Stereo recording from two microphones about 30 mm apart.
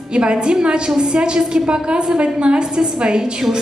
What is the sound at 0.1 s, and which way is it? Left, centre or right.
A woman's voice, right.